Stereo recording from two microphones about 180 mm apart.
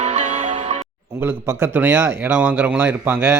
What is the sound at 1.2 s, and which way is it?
Speech, 15° right (ahead or behind).